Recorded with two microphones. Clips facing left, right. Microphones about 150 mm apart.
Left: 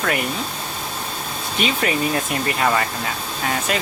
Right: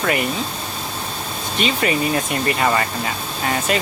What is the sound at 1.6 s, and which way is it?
Speech, centre (ahead or behind).